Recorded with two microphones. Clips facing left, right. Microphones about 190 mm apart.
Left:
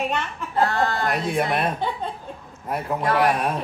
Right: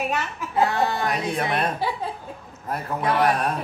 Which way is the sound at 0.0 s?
5° right (ahead or behind).